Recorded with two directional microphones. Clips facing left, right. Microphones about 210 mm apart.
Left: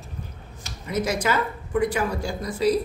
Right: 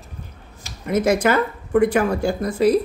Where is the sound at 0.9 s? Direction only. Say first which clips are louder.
Right 7 dB; 55° right (ahead or behind).